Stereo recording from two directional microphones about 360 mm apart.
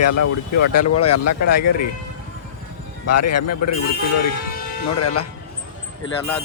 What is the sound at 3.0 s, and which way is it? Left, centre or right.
Speech, left.